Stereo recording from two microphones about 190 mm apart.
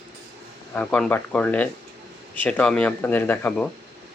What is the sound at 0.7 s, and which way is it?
Speech, 5° left (ahead or behind).